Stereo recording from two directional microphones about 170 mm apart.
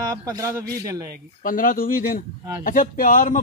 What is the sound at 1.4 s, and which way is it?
A man's voice, 55° left (ahead or behind).